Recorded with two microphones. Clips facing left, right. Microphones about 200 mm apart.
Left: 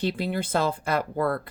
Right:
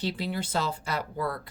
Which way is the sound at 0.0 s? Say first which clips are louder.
Left 4 dB; 55° left (ahead or behind).